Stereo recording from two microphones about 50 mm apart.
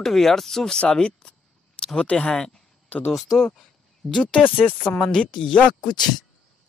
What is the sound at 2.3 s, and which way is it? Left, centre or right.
Speech, centre.